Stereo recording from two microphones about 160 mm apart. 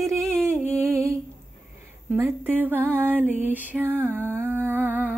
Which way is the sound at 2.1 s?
15° right (ahead or behind).